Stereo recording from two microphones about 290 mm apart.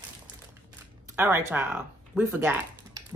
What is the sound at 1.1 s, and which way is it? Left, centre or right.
Speech, centre.